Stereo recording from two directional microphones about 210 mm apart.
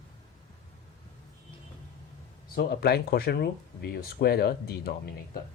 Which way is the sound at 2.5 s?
50° left (ahead or behind).